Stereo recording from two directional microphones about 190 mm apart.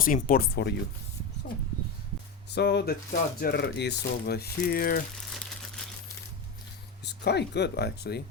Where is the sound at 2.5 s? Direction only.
65° left (ahead or behind).